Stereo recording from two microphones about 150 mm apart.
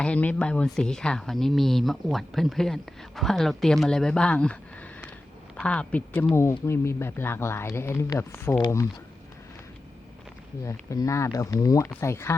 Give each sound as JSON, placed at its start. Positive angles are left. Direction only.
{"t": 0.0, "sound": "speech", "side_deg": 10}
{"t": 10.6, "sound": "speech", "side_deg": 20}